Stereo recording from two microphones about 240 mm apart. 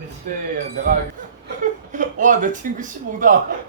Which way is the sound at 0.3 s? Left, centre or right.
Right.